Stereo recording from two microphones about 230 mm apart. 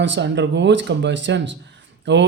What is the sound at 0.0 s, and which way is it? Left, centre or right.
Speech, right.